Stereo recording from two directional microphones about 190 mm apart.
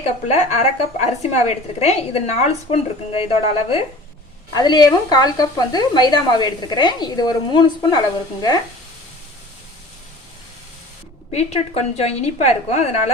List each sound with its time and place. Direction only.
0.0 s a woman's voice: 35° left (ahead or behind)
4.5 s speech: 20° left (ahead or behind)
11.3 s a woman's voice: 35° left (ahead or behind)